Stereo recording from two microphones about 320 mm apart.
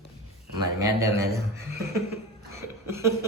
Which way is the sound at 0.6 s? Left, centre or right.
Centre.